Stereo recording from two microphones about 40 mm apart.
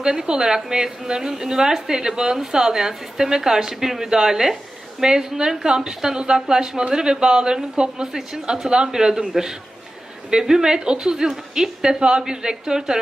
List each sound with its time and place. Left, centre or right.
0.0 s a woman's voice: centre